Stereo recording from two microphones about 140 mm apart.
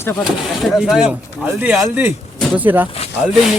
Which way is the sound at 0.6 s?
Centre (ahead or behind).